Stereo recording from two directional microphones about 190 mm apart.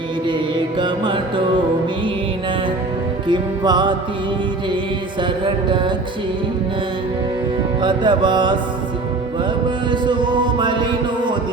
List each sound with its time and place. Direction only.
0.8 s music: 25° right (ahead or behind)
3.2 s music: 25° right (ahead or behind)
7.8 s music: 25° right (ahead or behind)
9.6 s music: 25° right (ahead or behind)